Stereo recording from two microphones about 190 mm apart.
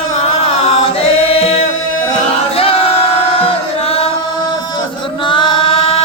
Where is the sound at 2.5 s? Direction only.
30° left (ahead or behind).